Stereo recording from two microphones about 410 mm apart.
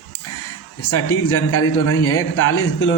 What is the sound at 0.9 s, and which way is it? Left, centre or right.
A man's voice, left.